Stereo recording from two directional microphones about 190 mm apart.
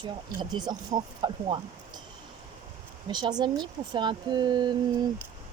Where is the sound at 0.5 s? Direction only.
20° right (ahead or behind).